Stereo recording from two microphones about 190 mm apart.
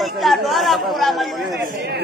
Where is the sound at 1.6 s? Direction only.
60° right (ahead or behind).